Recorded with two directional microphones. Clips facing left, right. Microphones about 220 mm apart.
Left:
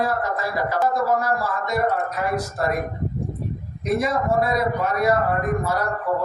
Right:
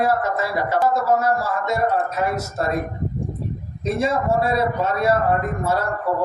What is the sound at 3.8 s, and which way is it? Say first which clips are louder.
A woman's voice: right 1 dB; 25° right (ahead or behind).